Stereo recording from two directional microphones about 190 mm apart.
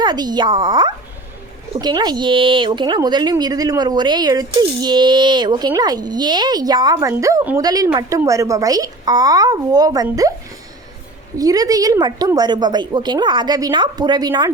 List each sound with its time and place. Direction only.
0.0 s speech: 20° right (ahead or behind)
11.3 s speech: 20° right (ahead or behind)